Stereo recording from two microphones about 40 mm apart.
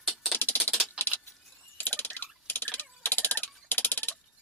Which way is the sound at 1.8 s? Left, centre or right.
Left.